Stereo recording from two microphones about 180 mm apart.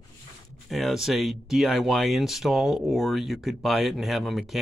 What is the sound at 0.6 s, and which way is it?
Speech, centre (ahead or behind).